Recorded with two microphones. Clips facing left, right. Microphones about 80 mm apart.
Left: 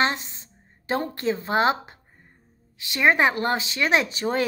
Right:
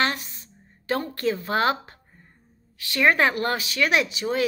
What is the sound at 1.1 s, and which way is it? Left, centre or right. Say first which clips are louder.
Speech: left 2 dB; left.